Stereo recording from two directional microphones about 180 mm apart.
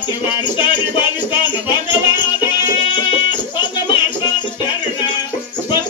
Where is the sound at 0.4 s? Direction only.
25° left (ahead or behind).